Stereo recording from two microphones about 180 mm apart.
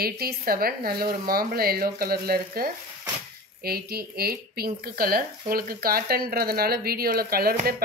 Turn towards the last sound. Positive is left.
turn(degrees=-55)  # may be behind; listen again after turning